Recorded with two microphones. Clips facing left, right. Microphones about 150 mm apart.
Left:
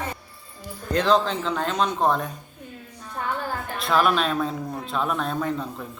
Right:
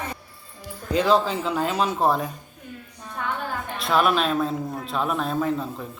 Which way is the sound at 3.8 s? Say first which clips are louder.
Even; centre (ahead or behind).